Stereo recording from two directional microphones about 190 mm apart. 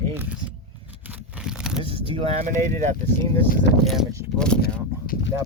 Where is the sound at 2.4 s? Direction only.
40° right (ahead or behind).